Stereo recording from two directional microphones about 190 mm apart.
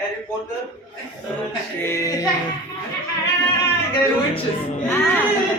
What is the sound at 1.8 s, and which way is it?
Speech, 15° left (ahead or behind).